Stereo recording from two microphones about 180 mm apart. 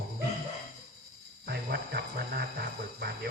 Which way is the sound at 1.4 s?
60° right (ahead or behind).